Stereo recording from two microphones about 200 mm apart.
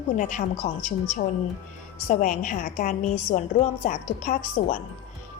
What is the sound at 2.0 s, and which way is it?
A woman's voice, 40° left (ahead or behind).